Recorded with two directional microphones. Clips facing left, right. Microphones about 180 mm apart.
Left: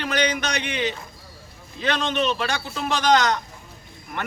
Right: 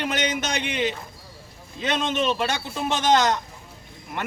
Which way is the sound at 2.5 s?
20° right (ahead or behind).